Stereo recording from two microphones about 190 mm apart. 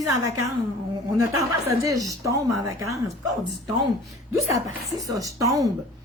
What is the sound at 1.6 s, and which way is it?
A woman's voice, 20° right (ahead or behind).